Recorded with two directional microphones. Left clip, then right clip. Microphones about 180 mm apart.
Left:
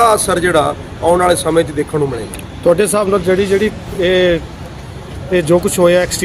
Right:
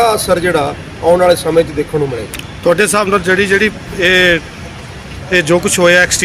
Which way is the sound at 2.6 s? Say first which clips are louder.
Right 1 dB; 5° left (ahead or behind).